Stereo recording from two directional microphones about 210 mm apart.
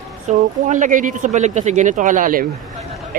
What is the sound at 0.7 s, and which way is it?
Speech, 35° right (ahead or behind).